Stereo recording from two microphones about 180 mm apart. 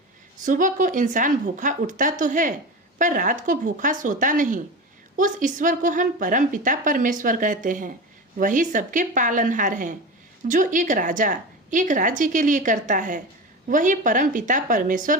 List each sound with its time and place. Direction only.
0.4 s a woman's voice: 45° right (ahead or behind)